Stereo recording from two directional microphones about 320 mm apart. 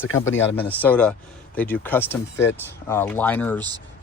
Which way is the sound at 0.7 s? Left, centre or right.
Centre.